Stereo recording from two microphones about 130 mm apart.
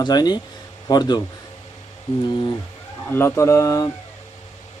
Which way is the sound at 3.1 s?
20° left (ahead or behind).